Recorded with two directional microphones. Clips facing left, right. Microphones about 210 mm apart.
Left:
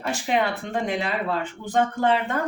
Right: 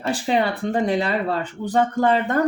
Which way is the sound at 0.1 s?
35° right (ahead or behind).